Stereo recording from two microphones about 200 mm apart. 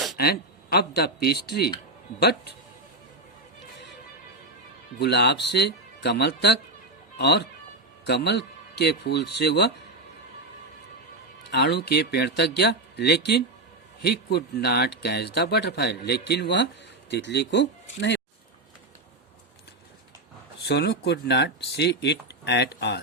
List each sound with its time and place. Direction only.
0.2 s a man's voice: 50° left (ahead or behind)
4.9 s speech: 55° left (ahead or behind)
11.5 s speech: 55° left (ahead or behind)
20.7 s speech: 55° left (ahead or behind)